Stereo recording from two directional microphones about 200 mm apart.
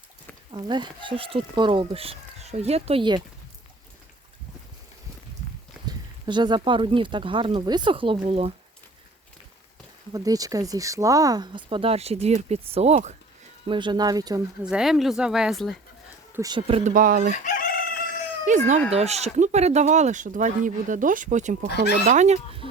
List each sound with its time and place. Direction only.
0.5 s speech: 20° right (ahead or behind)
5.8 s speech: 20° right (ahead or behind)
10.1 s speech: 20° right (ahead or behind); by 13.1 s 35° right (ahead or behind)
13.7 s speech: 25° right (ahead or behind)
14.6 s speech: 5° right (ahead or behind)
16.3 s speech: 20° right (ahead or behind)
16.9 s chicken: 45° right (ahead or behind)
17.3 s crowing: 40° left (ahead or behind)
18.4 s speech: 40° right (ahead or behind)